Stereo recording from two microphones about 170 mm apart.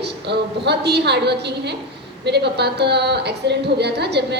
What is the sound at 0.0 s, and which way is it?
A woman's voice, 80° right.